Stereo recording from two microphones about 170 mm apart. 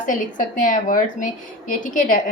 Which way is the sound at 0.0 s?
50° left (ahead or behind).